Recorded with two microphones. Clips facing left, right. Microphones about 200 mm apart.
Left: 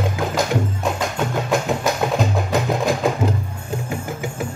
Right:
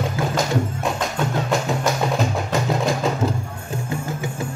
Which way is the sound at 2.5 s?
15° left (ahead or behind).